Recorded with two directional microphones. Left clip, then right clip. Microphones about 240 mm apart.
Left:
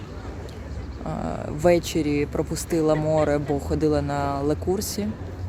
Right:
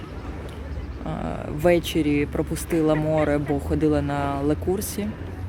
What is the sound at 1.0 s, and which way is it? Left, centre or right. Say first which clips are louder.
Speech: left 1 dB; centre.